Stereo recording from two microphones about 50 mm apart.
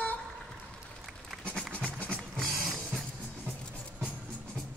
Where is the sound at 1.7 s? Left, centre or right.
Left.